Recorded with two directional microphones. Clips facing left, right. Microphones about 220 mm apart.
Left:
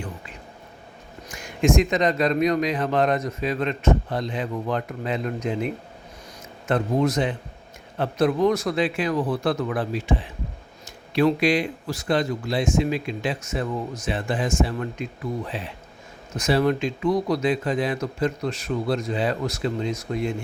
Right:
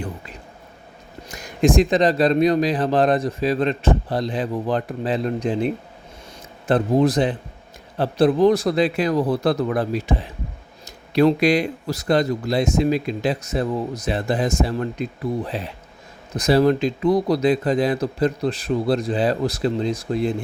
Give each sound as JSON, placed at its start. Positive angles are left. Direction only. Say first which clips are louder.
{"t": 1.3, "sound": "speech", "louder": "right 3 dB", "side_deg": -35}